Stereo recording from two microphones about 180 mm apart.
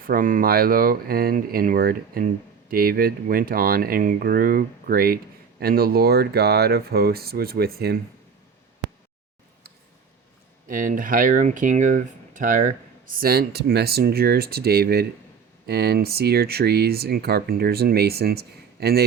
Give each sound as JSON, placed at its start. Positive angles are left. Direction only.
{"t": 0.0, "sound": "speech", "side_deg": -50}
{"t": 10.7, "sound": "speech", "side_deg": -50}
{"t": 13.1, "sound": "speech", "side_deg": -60}